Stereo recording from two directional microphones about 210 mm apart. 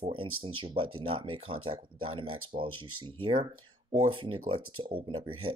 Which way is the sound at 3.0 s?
25° right (ahead or behind).